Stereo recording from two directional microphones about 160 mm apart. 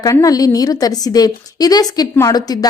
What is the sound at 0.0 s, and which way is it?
A woman's voice, 20° left (ahead or behind).